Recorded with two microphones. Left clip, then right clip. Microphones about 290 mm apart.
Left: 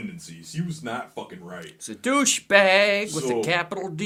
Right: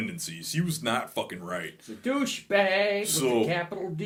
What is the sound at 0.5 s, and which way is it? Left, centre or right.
Speech, right.